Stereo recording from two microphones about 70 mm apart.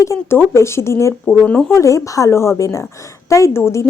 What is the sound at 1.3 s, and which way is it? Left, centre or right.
Speech, centre.